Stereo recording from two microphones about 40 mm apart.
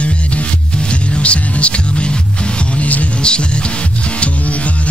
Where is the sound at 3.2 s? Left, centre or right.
Left.